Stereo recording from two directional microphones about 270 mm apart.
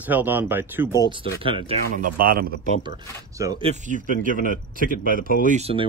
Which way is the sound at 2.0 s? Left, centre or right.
Right.